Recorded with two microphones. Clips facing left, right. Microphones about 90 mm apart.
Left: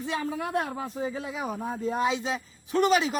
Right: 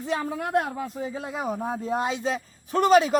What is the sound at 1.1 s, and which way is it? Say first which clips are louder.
Speech: right 3 dB; 45° right (ahead or behind).